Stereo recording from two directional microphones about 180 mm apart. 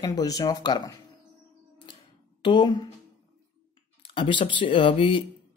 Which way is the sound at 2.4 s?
25° left (ahead or behind).